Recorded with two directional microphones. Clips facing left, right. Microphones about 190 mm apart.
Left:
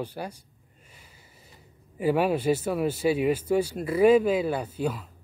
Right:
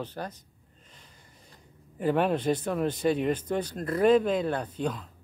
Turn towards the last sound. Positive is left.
turn(degrees=5)  # may be behind; listen again after turning